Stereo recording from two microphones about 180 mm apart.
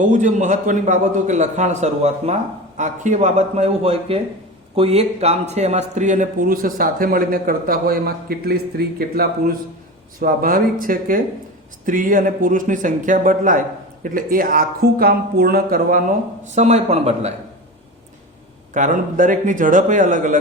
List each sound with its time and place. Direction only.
0.0 s a man's voice: 45° right (ahead or behind)
16.6 s a man's voice: 40° right (ahead or behind)
18.7 s speech: 45° right (ahead or behind)